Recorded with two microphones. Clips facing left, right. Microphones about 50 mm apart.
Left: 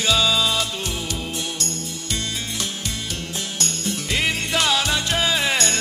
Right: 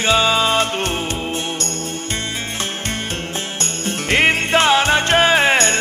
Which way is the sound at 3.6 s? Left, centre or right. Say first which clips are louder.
Right 1 dB; right.